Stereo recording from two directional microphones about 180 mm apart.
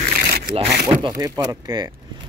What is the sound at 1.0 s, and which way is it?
Speech, 20° right (ahead or behind).